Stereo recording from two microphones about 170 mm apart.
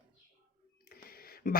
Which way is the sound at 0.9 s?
60° left (ahead or behind).